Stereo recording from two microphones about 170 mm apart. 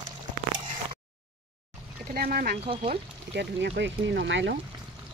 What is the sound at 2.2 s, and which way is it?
Speech, 60° right (ahead or behind).